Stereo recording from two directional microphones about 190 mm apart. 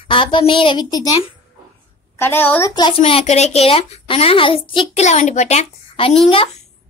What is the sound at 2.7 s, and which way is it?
A woman's voice, 25° left (ahead or behind).